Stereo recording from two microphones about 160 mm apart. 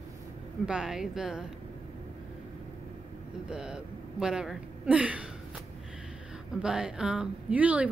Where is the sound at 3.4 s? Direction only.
5° right (ahead or behind).